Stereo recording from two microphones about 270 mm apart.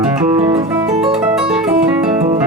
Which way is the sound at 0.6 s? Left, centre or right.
Centre.